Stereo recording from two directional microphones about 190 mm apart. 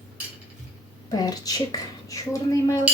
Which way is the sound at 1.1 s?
20° left (ahead or behind).